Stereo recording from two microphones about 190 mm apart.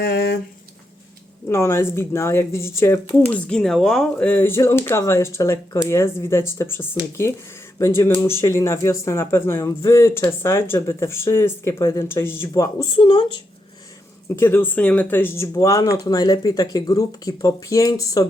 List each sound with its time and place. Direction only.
0.0 s a sound: 60° left (ahead or behind)
1.5 s speech: 15° left (ahead or behind)
14.3 s speech: 10° left (ahead or behind)